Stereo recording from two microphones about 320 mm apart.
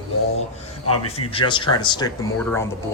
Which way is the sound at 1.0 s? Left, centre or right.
Centre.